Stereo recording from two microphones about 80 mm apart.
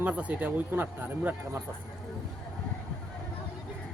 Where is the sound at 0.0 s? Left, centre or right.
Centre.